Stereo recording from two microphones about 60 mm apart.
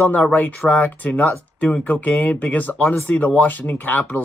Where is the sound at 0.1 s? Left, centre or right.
Left.